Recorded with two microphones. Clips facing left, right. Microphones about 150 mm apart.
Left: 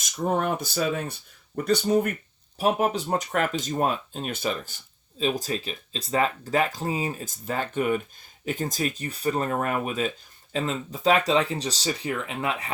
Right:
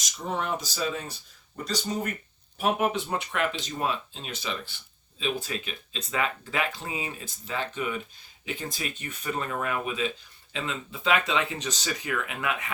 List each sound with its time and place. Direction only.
0.0 s speech: 50° left (ahead or behind)
2.6 s speech: 35° left (ahead or behind)